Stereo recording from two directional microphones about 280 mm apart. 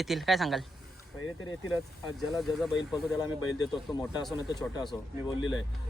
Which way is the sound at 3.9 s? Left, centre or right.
Centre.